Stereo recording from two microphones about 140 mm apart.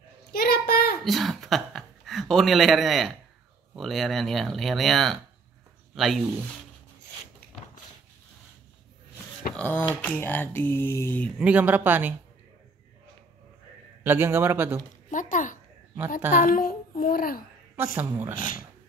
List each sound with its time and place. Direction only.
0.3 s child singing: 90° left
1.0 s speech: centre (ahead or behind)
9.6 s speech: 10° left (ahead or behind)
11.3 s speech: 10° right (ahead or behind)
14.0 s speech: 15° right (ahead or behind)
15.0 s speech: 65° left (ahead or behind)
16.3 s a child's voice: 80° left
17.9 s speech: 15° right (ahead or behind)
18.3 s speech: 75° left (ahead or behind)